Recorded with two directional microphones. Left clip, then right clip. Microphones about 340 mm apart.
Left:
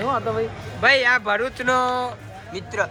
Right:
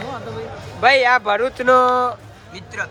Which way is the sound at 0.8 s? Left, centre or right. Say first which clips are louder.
Right 3 dB; centre.